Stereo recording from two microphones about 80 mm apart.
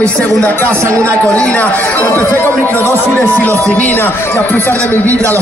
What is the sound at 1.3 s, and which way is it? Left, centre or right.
A man's voice, centre.